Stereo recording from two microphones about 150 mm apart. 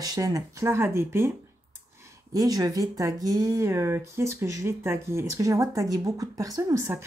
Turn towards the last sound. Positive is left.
turn(degrees=-20)  # may be behind; listen again after turning